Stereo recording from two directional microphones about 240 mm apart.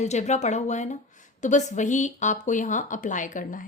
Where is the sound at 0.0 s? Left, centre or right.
Left.